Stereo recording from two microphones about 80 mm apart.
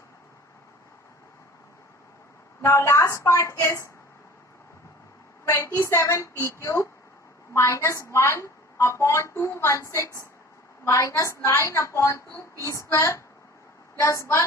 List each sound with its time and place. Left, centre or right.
2.6 s a woman's voice: left
5.5 s a woman's voice: left